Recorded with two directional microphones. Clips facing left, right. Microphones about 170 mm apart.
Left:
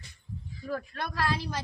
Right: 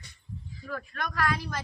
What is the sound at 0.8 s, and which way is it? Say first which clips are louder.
Speech: right 3 dB; 30° left (ahead or behind).